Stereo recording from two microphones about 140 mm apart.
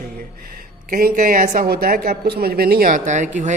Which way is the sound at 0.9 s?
85° right.